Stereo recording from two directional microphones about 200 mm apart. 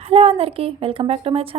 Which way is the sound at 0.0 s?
30° right (ahead or behind).